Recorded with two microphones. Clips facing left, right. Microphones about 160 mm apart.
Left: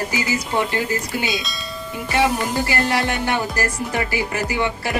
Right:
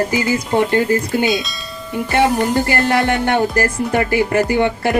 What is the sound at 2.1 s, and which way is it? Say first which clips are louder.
Music: right 5 dB; 55° right (ahead or behind).